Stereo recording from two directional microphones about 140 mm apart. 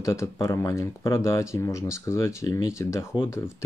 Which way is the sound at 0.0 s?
20° left (ahead or behind).